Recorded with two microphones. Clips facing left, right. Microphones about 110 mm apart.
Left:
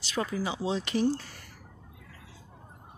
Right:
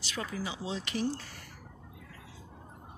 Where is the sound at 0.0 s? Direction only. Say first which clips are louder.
Left 6 dB; 30° left (ahead or behind).